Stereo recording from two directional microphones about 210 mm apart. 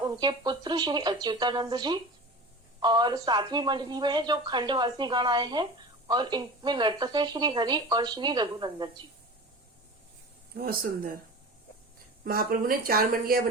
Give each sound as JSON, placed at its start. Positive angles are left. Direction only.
{"t": 0.0, "sound": "speech", "side_deg": -20}
{"t": 10.5, "sound": "speech", "side_deg": -45}
{"t": 12.2, "sound": "speech", "side_deg": -45}